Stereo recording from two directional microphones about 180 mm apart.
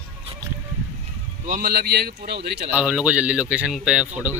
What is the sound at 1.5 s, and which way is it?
A man's voice, 60° right (ahead or behind).